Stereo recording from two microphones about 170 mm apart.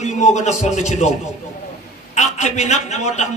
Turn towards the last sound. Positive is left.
turn(degrees=40)  # may be behind; listen again after turning